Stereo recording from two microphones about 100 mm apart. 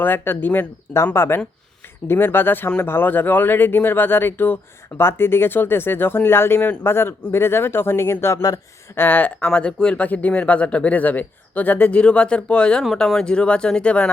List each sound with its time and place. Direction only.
0.0 s speech: 20° left (ahead or behind)
12.8 s speech: centre (ahead or behind)